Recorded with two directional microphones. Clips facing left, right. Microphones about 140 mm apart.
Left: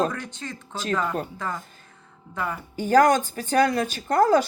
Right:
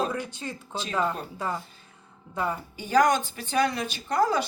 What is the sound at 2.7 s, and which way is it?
Speech, 45° left (ahead or behind).